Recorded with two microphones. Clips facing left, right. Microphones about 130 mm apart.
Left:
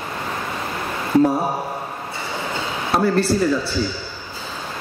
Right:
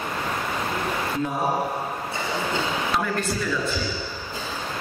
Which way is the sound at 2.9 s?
35° left (ahead or behind).